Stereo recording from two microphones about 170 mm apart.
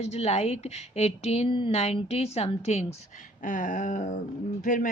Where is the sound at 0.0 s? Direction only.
40° left (ahead or behind).